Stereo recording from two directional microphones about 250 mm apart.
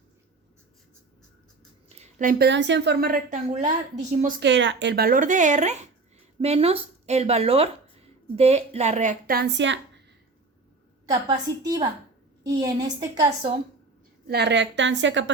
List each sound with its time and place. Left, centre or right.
2.0 s a sound: right
2.5 s a woman's voice: right
11.3 s a woman's voice: centre
14.3 s a woman's voice: right